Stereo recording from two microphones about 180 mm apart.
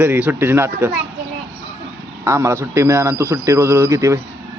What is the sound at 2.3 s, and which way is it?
Speech, 15° right (ahead or behind).